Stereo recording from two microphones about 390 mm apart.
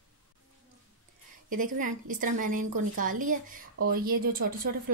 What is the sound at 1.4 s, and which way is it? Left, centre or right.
Speech, right.